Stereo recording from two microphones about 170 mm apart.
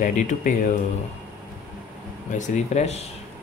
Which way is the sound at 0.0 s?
50° left (ahead or behind).